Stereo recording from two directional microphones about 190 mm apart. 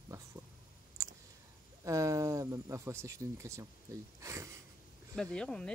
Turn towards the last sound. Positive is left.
turn(degrees=5)  # may be behind; listen again after turning